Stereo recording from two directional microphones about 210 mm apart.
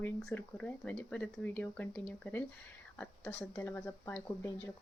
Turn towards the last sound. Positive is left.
turn(degrees=10)  # may be behind; listen again after turning